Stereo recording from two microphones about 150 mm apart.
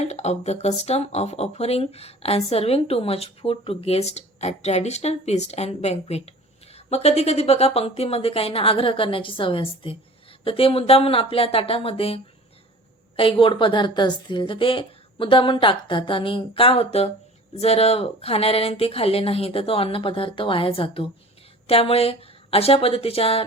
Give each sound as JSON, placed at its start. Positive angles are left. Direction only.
{"t": 0.0, "sound": "a woman's voice", "side_deg": 45}